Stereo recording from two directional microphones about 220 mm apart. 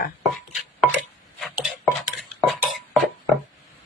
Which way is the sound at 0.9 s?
Centre (ahead or behind).